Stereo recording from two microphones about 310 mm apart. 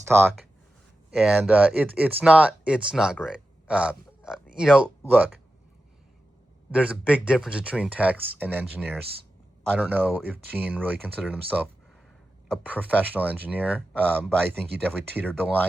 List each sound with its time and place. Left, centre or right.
0.0 s speech: centre
6.7 s speech: centre